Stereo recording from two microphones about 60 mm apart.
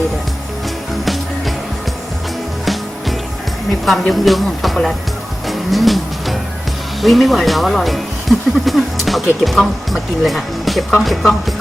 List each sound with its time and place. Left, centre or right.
1.0 s music: centre
3.8 s speech: centre
5.5 s music: centre
7.0 s speech: centre